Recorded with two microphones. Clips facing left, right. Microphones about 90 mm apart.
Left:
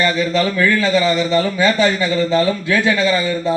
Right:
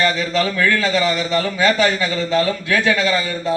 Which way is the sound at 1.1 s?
25° left (ahead or behind).